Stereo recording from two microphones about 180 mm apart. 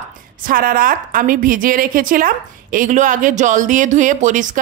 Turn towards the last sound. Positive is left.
turn(degrees=-45)  # may be behind; listen again after turning